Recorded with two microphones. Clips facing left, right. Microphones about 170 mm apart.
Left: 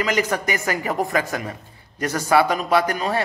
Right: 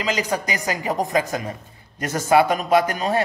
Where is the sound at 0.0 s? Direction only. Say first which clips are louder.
Left 2 dB; 15° right (ahead or behind).